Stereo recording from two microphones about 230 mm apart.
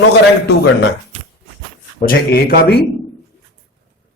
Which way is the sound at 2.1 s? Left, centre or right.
Left.